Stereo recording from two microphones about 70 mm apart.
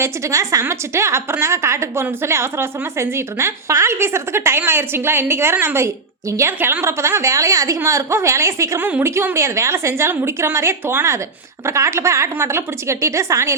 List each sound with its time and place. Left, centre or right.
0.0 s a woman's voice: right
9.0 s a woman's voice: right